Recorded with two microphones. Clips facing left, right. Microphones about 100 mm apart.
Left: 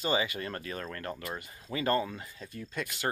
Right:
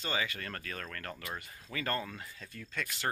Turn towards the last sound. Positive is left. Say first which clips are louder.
# left 3 dB
turn(degrees=10)  # may be behind; listen again after turning